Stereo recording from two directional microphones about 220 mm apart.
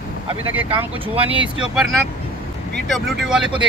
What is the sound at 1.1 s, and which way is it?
Speech, 25° right (ahead or behind).